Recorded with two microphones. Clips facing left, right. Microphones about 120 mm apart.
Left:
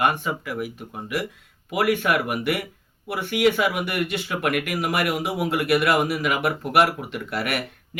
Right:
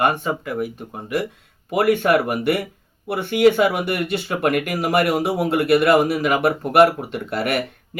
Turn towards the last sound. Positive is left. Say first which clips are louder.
# right 5 dB
turn(degrees=-30)  # may be behind; listen again after turning